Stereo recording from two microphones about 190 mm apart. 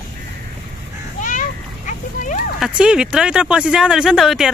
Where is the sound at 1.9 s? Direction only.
45° left (ahead or behind).